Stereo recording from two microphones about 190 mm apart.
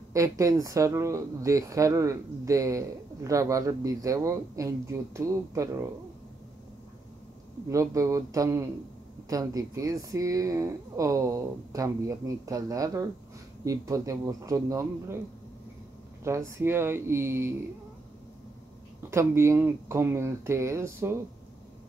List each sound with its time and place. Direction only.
0.1 s speech: 15° right (ahead or behind)
7.7 s speech: 15° right (ahead or behind)
16.3 s speech: 15° right (ahead or behind)
19.0 s speech: 15° right (ahead or behind)